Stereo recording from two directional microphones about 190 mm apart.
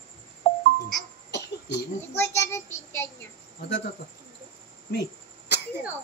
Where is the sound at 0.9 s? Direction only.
65° left (ahead or behind).